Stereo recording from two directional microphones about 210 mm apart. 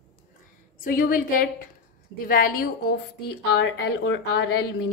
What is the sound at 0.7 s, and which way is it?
A woman's voice, 40° left (ahead or behind).